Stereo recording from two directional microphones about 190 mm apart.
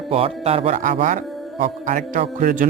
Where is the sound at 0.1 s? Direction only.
30° right (ahead or behind).